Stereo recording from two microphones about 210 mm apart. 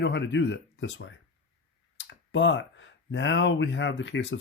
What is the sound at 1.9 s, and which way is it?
Speech, 60° left (ahead or behind).